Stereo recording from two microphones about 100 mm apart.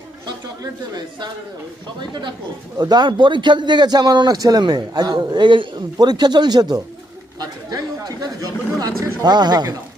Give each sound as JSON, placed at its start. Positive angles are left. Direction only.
{"t": 0.3, "sound": "speech", "side_deg": -45}
{"t": 2.7, "sound": "a man's voice", "side_deg": -45}
{"t": 9.2, "sound": "a man's voice", "side_deg": -45}